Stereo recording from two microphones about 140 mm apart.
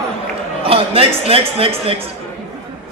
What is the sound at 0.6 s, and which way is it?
A man's voice, 45° right (ahead or behind).